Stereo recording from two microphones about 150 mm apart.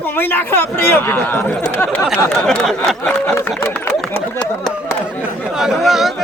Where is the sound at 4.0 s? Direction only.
5° left (ahead or behind).